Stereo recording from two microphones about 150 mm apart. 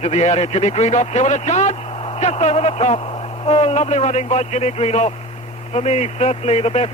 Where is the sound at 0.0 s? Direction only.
45° left (ahead or behind).